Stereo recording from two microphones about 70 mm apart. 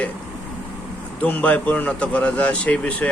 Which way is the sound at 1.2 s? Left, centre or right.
Left.